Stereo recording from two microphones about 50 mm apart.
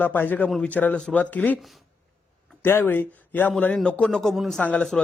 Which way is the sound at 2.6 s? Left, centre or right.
Left.